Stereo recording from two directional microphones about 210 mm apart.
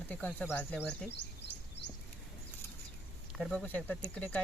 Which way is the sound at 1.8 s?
55° left (ahead or behind).